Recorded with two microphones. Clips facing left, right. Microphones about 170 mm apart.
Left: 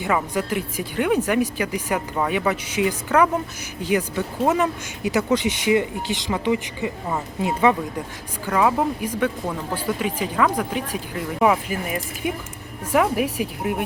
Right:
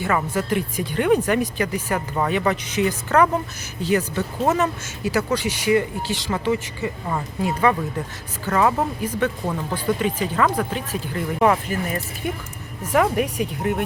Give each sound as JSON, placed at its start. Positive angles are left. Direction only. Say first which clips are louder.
{"t": 0.0, "sound": "speech", "louder": "even", "side_deg": 15}